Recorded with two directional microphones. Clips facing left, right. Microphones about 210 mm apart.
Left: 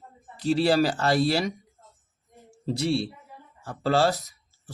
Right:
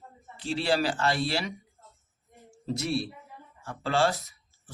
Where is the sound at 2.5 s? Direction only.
30° left (ahead or behind).